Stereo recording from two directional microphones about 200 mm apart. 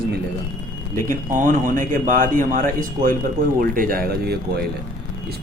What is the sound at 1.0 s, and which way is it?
A man's voice, 40° right (ahead or behind).